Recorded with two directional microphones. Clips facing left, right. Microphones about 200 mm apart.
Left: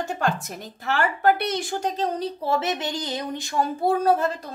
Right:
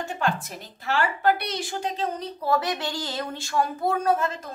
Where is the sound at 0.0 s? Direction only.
40° left (ahead or behind).